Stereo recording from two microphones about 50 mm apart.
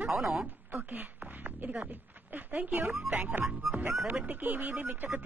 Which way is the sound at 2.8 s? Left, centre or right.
Right.